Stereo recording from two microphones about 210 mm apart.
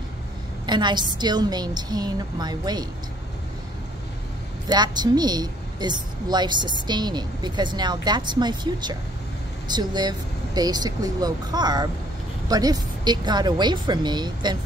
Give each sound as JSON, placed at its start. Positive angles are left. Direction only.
{"t": 0.7, "sound": "a woman's voice", "side_deg": -20}
{"t": 4.6, "sound": "a woman's voice", "side_deg": -20}